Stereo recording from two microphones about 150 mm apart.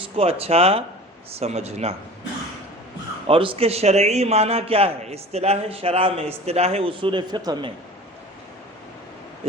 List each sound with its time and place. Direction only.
0.0 s a man's voice: 40° right (ahead or behind)
3.2 s a man's voice: 35° right (ahead or behind)